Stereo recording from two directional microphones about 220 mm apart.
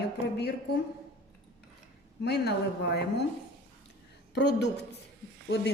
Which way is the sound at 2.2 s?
50° left (ahead or behind).